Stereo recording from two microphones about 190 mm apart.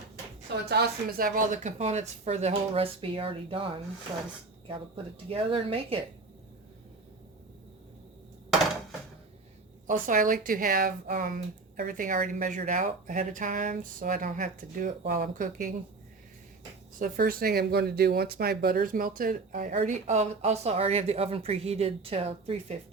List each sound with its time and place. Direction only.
0.6 s speech: 55° right (ahead or behind); by 3.7 s 30° right (ahead or behind)
4.7 s speech: 30° right (ahead or behind)
9.8 s speech: 45° right (ahead or behind)
17.0 s speech: 50° right (ahead or behind); by 22.8 s 30° right (ahead or behind)